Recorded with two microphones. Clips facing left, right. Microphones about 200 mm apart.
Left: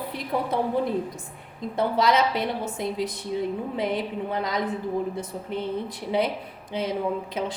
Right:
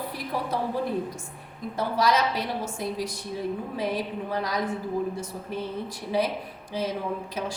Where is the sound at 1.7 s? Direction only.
20° left (ahead or behind).